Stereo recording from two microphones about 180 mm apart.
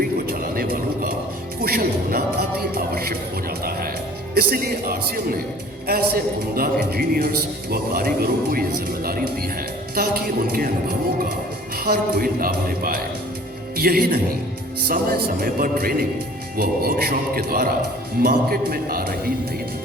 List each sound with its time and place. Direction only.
0.3 s a sound: 55° right (ahead or behind)
1.6 s speech: 55° right (ahead or behind)
11.8 s speech: 60° right (ahead or behind)